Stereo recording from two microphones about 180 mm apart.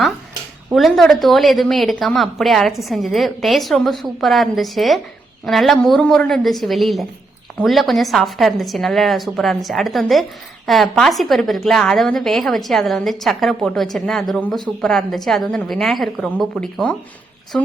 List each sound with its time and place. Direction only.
0.7 s a woman's voice: centre (ahead or behind)